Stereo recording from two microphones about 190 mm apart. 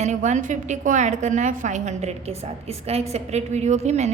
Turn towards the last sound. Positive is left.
turn(degrees=-35)  # may be behind; listen again after turning